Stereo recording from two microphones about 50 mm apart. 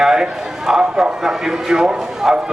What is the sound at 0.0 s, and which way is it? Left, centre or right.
A man's voice, centre.